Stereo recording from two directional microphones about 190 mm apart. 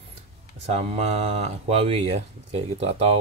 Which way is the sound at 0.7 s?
35° right (ahead or behind).